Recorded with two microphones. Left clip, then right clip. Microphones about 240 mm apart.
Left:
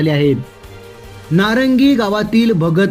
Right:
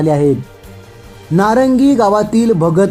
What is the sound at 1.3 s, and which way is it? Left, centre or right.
Speech, left.